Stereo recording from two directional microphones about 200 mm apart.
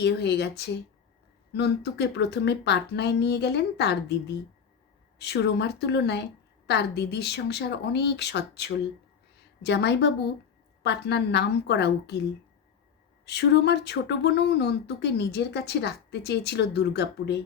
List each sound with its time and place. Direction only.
0.0 s speech: 60° left (ahead or behind)
5.2 s speech: 60° left (ahead or behind)
13.2 s speech: 60° left (ahead or behind)